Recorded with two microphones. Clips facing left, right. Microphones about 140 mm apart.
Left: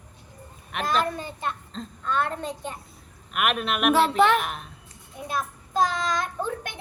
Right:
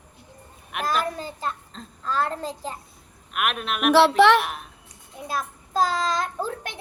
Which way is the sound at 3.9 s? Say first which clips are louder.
Right 5 dB; 80° right.